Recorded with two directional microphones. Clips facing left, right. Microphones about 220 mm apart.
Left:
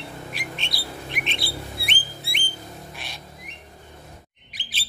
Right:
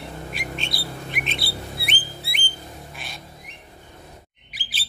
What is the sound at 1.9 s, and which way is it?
Music, centre (ahead or behind).